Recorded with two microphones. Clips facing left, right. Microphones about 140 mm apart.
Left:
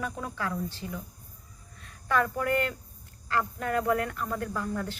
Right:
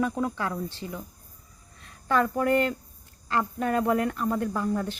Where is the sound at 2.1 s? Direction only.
30° right (ahead or behind).